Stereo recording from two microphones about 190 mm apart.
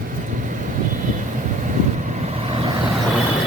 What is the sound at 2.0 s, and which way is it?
Vehicle, 40° right (ahead or behind).